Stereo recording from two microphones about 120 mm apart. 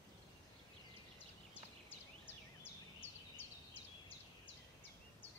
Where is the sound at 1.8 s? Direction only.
15° left (ahead or behind).